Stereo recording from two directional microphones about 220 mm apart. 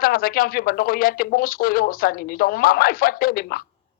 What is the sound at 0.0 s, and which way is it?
Speech, 40° left (ahead or behind).